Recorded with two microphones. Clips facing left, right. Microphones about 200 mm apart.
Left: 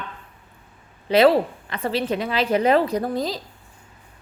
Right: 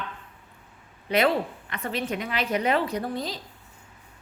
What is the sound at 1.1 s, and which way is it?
A woman's voice, 30° left (ahead or behind).